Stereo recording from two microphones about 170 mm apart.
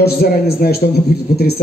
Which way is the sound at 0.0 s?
70° left (ahead or behind).